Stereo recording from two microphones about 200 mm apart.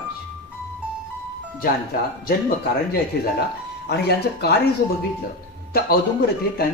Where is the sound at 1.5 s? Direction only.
45° left (ahead or behind).